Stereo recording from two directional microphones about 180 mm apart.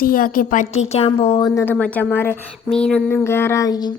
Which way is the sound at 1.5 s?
15° left (ahead or behind).